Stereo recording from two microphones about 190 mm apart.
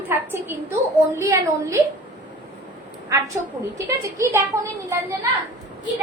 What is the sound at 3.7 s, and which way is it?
Speech, 15° right (ahead or behind).